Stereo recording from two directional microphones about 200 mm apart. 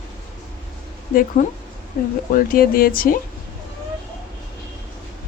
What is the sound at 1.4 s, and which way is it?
A woman's voice, 40° left (ahead or behind).